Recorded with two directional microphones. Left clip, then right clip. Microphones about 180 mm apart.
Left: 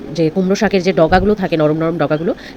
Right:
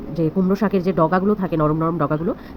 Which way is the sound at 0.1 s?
15° left (ahead or behind).